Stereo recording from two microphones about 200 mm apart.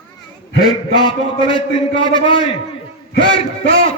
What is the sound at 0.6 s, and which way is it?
A man's voice, 20° left (ahead or behind).